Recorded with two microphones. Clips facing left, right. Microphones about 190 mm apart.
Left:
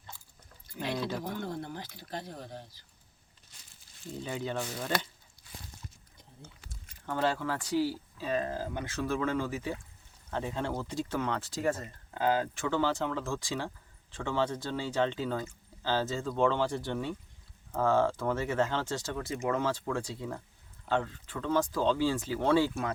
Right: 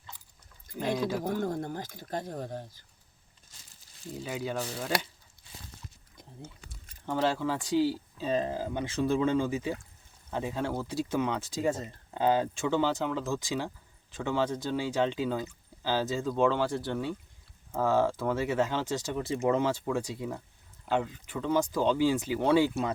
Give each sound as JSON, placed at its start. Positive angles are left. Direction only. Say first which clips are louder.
{"t": 1.2, "sound": "speech", "louder": "right 5 dB", "side_deg": -45}
{"t": 3.5, "sound": "crumpling", "louder": "right 2 dB", "side_deg": -45}
{"t": 4.1, "sound": "speech", "louder": "right 1 dB", "side_deg": -5}
{"t": 5.4, "sound": "walk", "louder": "right 2 dB", "side_deg": -20}
{"t": 7.1, "sound": "speech", "louder": "right 2 dB", "side_deg": -15}